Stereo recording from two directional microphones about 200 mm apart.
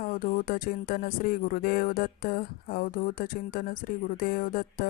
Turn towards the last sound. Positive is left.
turn(degrees=45)  # may be behind; listen again after turning